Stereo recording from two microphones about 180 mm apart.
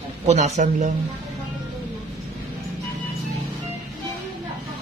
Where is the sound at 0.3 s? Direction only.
40° right (ahead or behind).